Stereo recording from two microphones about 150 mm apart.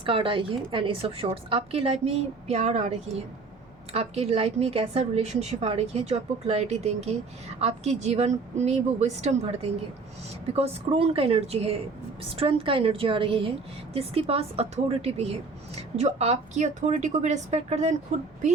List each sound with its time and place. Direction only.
0.0 s a woman's voice: 35° right (ahead or behind)